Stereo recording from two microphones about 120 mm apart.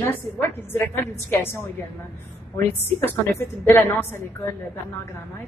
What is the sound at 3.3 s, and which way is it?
Speech, 20° left (ahead or behind).